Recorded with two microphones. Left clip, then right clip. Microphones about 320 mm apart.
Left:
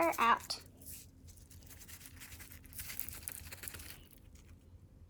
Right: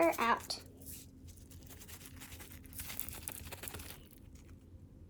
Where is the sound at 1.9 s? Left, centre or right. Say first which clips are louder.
Even; centre.